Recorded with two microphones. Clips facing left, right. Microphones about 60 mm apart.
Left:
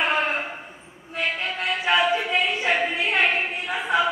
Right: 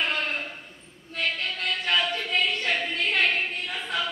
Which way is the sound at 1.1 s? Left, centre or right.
Centre.